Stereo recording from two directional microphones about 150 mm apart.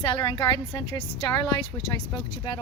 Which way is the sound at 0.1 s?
30° left (ahead or behind).